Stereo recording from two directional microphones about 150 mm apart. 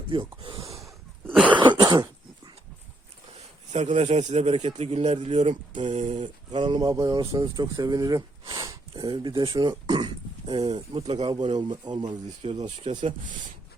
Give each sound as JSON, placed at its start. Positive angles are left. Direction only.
{"t": 0.1, "sound": "speech", "side_deg": -35}
{"t": 1.5, "sound": "throat clearing", "side_deg": -30}
{"t": 3.3, "sound": "a man's voice", "side_deg": -50}
{"t": 6.2, "sound": "speech", "side_deg": -35}
{"t": 12.4, "sound": "a man's voice", "side_deg": -45}
{"t": 12.9, "sound": "speech", "side_deg": -30}